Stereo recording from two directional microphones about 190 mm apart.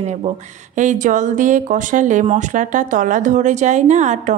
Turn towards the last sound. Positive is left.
turn(degrees=-40)  # may be behind; listen again after turning